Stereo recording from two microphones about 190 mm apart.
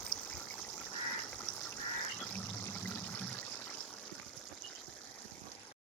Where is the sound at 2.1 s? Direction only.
10° left (ahead or behind).